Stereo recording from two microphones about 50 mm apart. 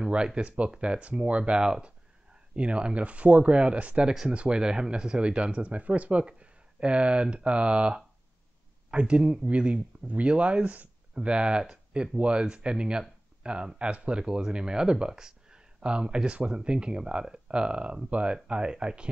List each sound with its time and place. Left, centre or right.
0.0 s speech: centre
11.1 s speech: centre